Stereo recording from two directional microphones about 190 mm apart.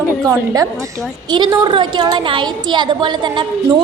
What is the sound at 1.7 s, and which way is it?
A woman's voice, 25° right (ahead or behind).